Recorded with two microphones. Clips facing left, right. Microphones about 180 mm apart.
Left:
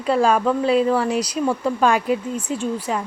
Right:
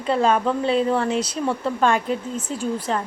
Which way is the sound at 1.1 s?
25° right (ahead or behind).